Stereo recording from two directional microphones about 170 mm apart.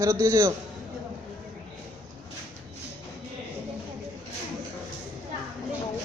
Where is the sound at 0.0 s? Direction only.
20° right (ahead or behind).